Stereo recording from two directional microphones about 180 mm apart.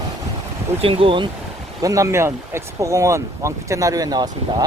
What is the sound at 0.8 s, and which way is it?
Speech, 30° right (ahead or behind).